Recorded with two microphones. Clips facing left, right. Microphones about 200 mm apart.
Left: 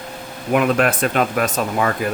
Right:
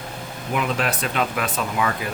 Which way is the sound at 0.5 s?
55° left (ahead or behind).